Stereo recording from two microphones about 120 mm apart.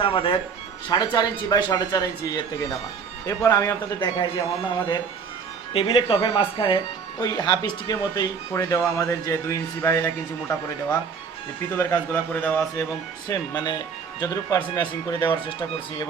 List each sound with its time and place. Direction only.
0.0 s speech: 45° left (ahead or behind)
0.9 s a man's voice: 35° left (ahead or behind)
4.0 s speech: 35° left (ahead or behind)
5.7 s a man's voice: 45° left (ahead or behind); by 10.1 s 20° left (ahead or behind)
11.6 s speech: 20° left (ahead or behind)
13.2 s speech: 35° left (ahead or behind)